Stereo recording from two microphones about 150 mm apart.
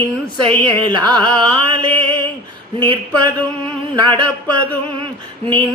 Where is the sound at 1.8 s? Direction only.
30° right (ahead or behind).